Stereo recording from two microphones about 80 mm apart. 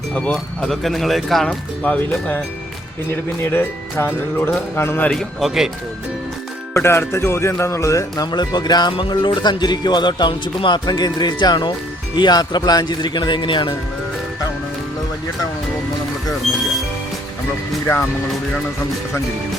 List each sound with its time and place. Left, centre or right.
0.1 s speech: centre
1.8 s speech: centre
3.1 s speech: left
5.4 s speech: centre
6.7 s speech: left
8.1 s speech: left